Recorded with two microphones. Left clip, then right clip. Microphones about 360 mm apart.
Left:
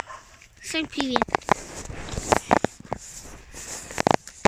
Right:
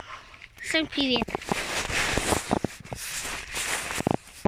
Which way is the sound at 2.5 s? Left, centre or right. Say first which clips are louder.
Left 7 dB; left.